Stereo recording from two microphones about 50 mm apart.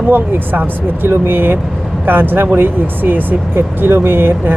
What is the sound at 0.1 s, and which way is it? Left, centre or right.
Speech, right.